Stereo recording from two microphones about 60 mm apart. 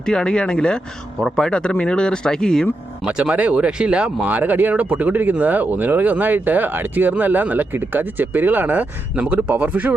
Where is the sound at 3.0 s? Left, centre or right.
Centre.